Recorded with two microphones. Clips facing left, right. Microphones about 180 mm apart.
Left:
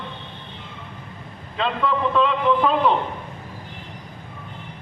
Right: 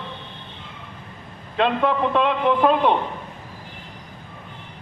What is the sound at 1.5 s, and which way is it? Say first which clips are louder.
A man's voice: right 3 dB; 55° right (ahead or behind).